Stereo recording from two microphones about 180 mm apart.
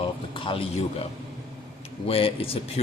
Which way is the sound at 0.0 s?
30° left (ahead or behind).